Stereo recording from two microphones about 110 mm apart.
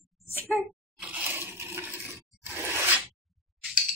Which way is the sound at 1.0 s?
20° right (ahead or behind).